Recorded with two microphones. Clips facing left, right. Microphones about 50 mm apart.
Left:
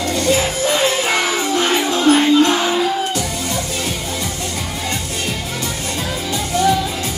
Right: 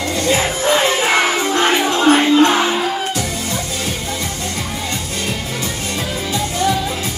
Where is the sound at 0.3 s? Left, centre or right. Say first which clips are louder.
Right 2 dB; right.